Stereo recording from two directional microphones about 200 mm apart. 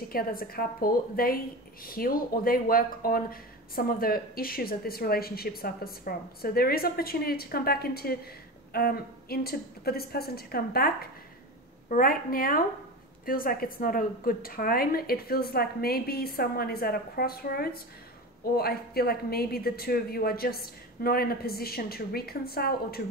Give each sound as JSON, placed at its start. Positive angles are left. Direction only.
{"t": 0.1, "sound": "a woman's voice", "side_deg": 45}